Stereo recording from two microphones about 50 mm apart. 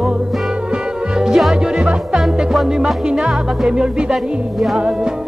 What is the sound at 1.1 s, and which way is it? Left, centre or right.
Music, centre.